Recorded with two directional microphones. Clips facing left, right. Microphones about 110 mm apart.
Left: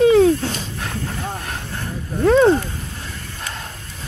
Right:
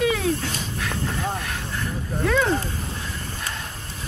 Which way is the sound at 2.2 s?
35° left (ahead or behind).